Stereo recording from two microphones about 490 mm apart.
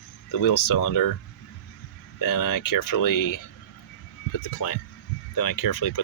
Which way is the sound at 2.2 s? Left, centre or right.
Left.